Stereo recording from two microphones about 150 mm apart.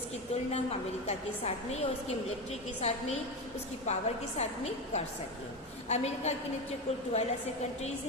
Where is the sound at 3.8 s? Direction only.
50° left (ahead or behind).